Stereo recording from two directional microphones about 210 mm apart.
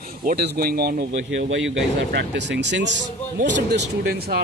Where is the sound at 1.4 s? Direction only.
60° right (ahead or behind).